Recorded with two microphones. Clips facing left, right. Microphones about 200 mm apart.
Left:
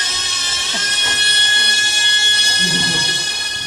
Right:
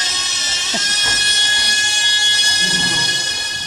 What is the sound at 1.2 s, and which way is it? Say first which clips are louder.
Music: left 1 dB; 55° left (ahead or behind).